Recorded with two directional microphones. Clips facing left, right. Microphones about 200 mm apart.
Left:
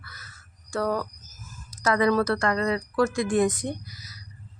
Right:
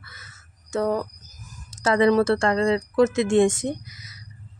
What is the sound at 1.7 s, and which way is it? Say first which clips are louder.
Speech: right 4 dB; 25° right (ahead or behind).